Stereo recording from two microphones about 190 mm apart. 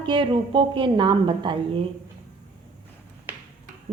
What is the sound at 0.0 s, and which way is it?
A woman's voice, 25° right (ahead or behind).